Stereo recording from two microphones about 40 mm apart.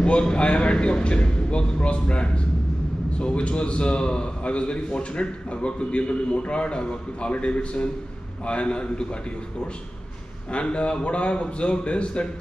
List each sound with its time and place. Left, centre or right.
0.0 s a man's voice: left
10.5 s a man's voice: left